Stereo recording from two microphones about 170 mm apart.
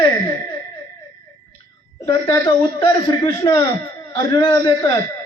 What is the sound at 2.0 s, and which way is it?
A man's voice, 20° left (ahead or behind).